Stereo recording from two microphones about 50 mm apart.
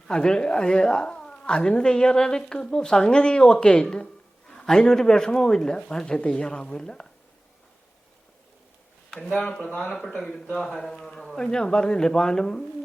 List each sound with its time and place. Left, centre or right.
0.1 s a woman's voice: centre
9.4 s a woman's voice: left